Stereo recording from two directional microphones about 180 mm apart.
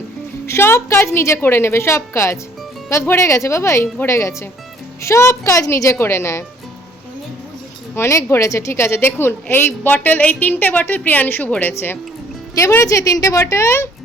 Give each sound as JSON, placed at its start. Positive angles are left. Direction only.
{"t": 0.4, "sound": "a woman's voice", "side_deg": 15}
{"t": 7.9, "sound": "a woman's voice", "side_deg": 15}